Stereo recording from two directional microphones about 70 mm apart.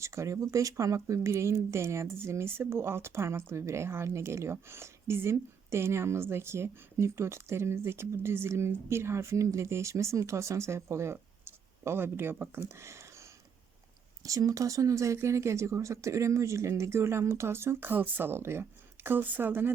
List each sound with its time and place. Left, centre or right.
0.0 s speech: right
14.3 s speech: right